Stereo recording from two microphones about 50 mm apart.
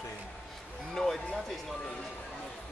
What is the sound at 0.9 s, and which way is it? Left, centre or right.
Speech, centre.